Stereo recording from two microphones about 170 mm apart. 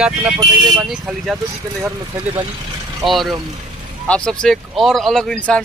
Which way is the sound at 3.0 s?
Centre (ahead or behind).